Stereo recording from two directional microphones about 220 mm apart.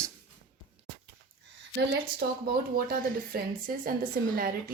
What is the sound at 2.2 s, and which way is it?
Speech, 45° right (ahead or behind).